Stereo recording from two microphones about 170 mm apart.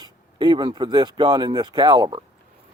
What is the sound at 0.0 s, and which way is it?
Speech, 25° right (ahead or behind).